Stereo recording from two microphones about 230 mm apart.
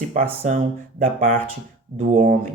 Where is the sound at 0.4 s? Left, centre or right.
Right.